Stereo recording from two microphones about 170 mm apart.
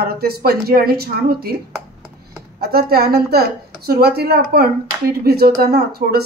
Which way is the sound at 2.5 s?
65° right (ahead or behind).